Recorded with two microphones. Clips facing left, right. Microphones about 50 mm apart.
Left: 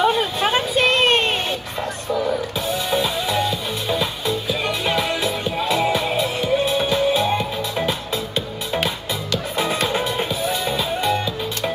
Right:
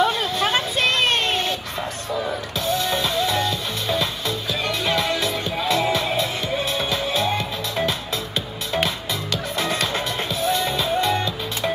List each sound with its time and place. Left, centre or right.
0.0 s a sound: centre
2.6 s music: centre
9.6 s music: centre